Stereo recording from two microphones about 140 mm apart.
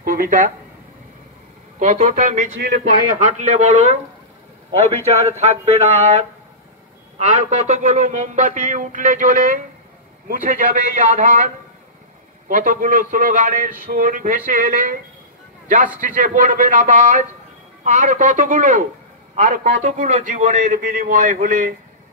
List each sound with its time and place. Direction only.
0.0 s a sound: 90° right
1.8 s speech: 55° right (ahead or behind)
5.4 s a man's voice: 50° right (ahead or behind); by 13.7 s 70° right (ahead or behind)
13.8 s speech: 85° right
16.2 s speech: 65° right (ahead or behind)
19.3 s a man's voice: 75° right (ahead or behind)